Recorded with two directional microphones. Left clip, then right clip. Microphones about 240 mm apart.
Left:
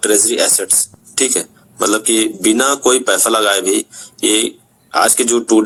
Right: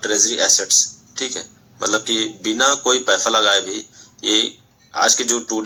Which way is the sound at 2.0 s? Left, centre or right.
Left.